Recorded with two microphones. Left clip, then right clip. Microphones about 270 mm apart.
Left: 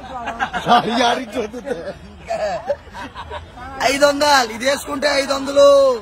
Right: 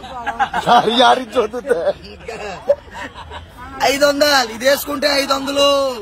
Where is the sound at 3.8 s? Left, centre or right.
Centre.